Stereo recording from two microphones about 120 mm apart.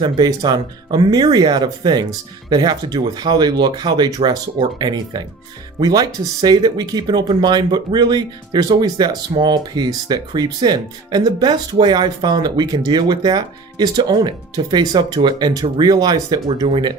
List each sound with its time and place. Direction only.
0.0 s speech: 35° right (ahead or behind)